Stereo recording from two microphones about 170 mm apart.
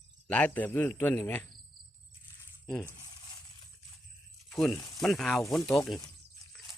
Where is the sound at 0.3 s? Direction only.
10° left (ahead or behind).